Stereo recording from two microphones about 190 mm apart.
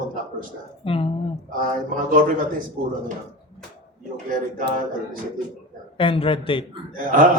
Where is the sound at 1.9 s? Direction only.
45° right (ahead or behind).